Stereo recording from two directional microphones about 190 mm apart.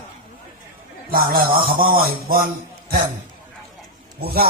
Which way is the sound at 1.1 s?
50° right (ahead or behind).